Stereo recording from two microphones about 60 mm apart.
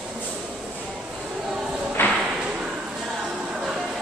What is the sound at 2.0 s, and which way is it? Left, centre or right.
Whip, left.